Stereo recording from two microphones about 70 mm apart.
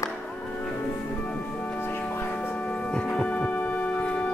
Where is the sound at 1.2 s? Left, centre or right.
Centre.